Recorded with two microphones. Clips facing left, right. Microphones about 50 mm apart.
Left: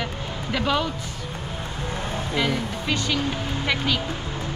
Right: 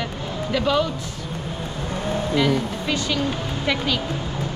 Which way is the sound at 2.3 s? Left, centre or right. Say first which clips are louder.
Right 3 dB; centre.